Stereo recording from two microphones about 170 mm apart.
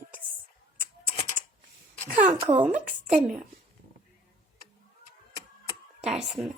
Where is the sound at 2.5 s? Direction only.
5° right (ahead or behind).